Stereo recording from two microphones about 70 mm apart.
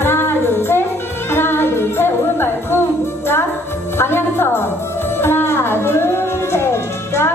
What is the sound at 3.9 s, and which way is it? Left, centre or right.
Music, left.